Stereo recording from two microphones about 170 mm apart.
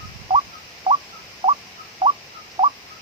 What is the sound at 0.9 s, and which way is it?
Rodents, 30° right (ahead or behind).